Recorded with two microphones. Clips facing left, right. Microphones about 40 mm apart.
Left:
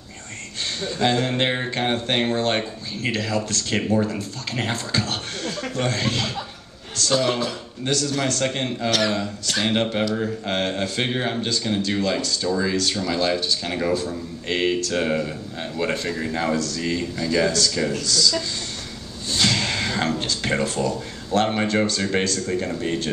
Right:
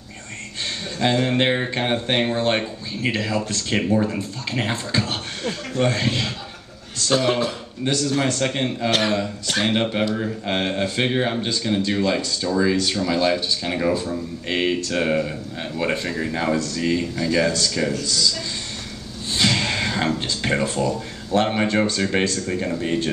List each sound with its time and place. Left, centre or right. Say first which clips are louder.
1.0 s a man's voice: right 2 dB; centre
8.9 s a man's voice: even; right
9.8 s speech: even; centre
19.3 s speech: right 1 dB; centre